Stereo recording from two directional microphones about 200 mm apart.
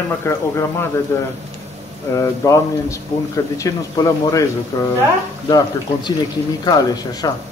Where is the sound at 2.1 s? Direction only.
15° left (ahead or behind).